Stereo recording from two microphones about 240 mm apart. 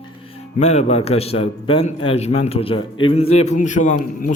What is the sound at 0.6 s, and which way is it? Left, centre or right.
A man's voice, left.